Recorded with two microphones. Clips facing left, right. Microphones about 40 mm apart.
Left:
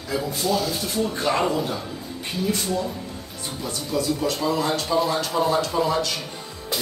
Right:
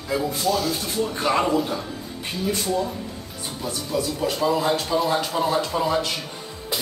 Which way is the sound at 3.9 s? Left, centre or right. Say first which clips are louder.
Left 1 dB; centre.